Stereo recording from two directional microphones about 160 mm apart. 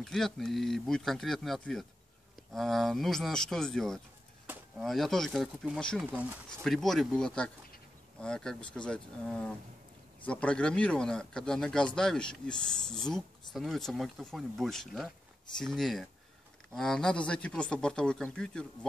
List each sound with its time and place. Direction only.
0.0 s speech: 5° left (ahead or behind)